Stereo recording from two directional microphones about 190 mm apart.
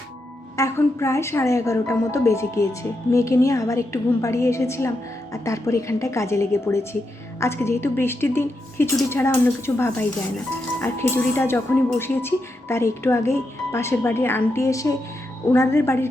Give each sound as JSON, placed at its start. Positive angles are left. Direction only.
{"t": 0.5, "sound": "speech", "side_deg": 15}